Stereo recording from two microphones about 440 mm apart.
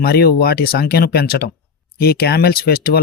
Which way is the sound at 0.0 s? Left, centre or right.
Left.